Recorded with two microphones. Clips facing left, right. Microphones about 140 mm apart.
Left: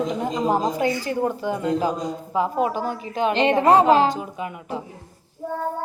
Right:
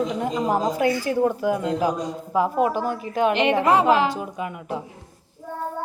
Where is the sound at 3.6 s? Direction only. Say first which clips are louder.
Left 4 dB; 30° left (ahead or behind).